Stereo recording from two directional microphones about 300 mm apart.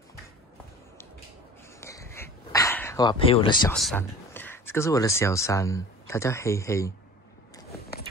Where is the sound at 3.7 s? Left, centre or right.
Centre.